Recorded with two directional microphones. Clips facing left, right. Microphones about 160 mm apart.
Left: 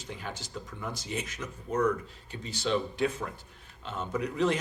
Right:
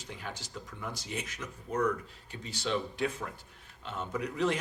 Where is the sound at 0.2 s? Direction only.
30° left (ahead or behind).